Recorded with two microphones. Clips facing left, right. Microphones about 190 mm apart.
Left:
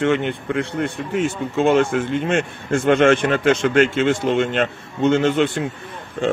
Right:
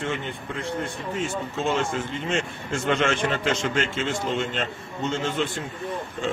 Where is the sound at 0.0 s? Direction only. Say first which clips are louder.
Left 10 dB; 70° left (ahead or behind).